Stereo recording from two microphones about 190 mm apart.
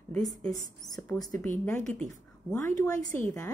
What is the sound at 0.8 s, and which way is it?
A woman's voice, 20° left (ahead or behind).